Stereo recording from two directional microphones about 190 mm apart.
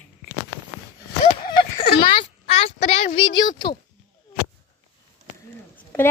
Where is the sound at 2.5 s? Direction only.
35° left (ahead or behind).